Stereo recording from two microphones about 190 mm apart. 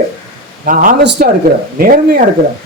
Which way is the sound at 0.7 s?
45° right (ahead or behind).